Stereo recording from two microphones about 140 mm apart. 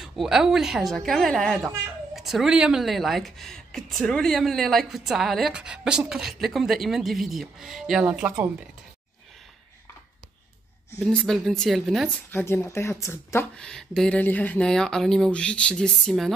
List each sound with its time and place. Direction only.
0.0 s speech: centre (ahead or behind)
11.1 s speech: 5° left (ahead or behind)
12.3 s speech: 15° left (ahead or behind)
13.6 s speech: 5° left (ahead or behind)